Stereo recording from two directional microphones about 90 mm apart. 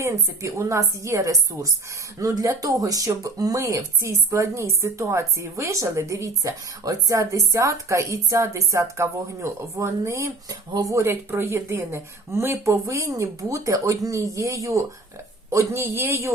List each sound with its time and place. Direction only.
0.0 s a man's voice: 35° right (ahead or behind)